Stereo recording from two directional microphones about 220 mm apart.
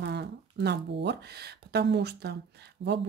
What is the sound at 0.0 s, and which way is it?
Speech, 50° right (ahead or behind).